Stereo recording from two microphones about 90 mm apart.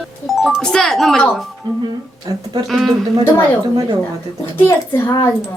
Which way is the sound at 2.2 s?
45° right (ahead or behind).